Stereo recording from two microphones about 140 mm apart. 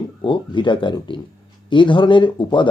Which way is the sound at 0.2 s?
35° left (ahead or behind).